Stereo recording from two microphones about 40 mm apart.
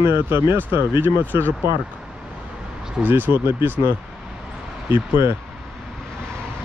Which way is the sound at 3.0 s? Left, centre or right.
Right.